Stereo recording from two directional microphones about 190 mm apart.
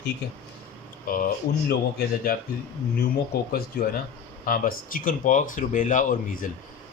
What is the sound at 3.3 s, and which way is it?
Speech, 55° left (ahead or behind).